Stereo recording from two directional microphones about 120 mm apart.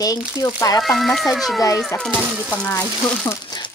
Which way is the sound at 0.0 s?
30° left (ahead or behind).